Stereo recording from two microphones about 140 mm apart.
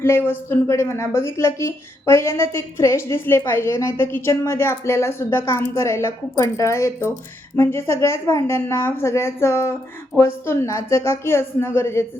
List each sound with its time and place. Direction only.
0.0 s a woman's voice: 15° left (ahead or behind)